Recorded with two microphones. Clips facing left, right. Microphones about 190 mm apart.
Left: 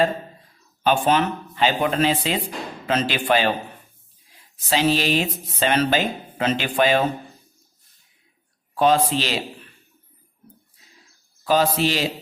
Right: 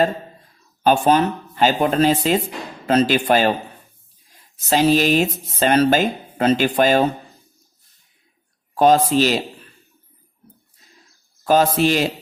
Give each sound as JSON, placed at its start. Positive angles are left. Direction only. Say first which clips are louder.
{"t": 0.9, "sound": "speech", "louder": "right 4 dB", "side_deg": -40}
{"t": 4.7, "sound": "speech", "louder": "right 4 dB", "side_deg": -45}
{"t": 8.7, "sound": "speech", "louder": "right 4 dB", "side_deg": -45}
{"t": 11.4, "sound": "speech", "louder": "right 4 dB", "side_deg": -45}